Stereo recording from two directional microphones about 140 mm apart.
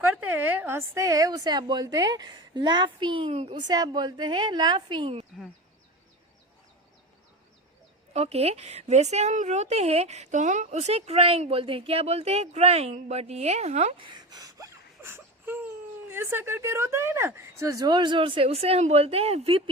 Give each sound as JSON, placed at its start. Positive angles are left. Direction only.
{"t": 0.0, "sound": "a woman's voice", "side_deg": -10}
{"t": 3.7, "sound": "speech", "side_deg": -30}
{"t": 8.1, "sound": "speech", "side_deg": -50}